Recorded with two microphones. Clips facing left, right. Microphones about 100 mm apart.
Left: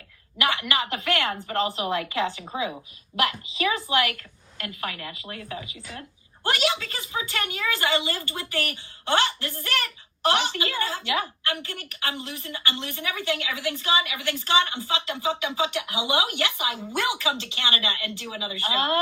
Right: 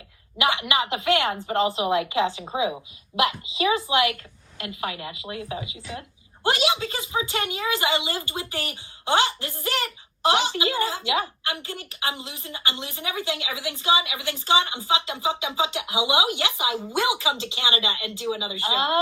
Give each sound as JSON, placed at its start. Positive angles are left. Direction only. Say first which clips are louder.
{"t": 0.3, "sound": "a woman's voice", "louder": "right 2 dB", "side_deg": -25}